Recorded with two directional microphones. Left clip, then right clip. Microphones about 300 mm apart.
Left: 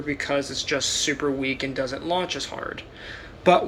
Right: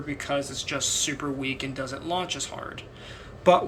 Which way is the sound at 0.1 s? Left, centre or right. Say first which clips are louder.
Left 4 dB; centre.